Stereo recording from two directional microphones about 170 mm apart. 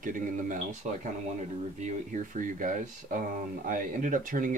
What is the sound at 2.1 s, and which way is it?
Speech, 50° right (ahead or behind).